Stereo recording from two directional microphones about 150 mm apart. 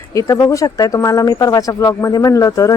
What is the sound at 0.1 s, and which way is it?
Speech, 20° left (ahead or behind).